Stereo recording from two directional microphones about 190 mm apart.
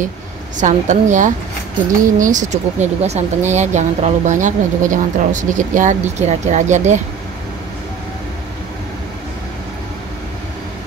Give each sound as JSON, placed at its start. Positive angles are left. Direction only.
{"t": 0.6, "sound": "speech", "side_deg": -40}